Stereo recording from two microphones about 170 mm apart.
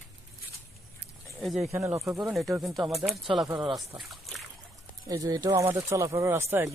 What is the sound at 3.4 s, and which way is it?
Speech, 25° right (ahead or behind).